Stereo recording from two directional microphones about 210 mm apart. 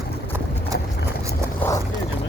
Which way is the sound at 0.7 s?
55° left (ahead or behind).